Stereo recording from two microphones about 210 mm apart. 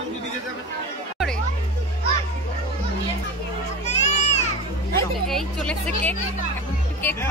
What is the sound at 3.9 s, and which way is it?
Music, 30° left (ahead or behind).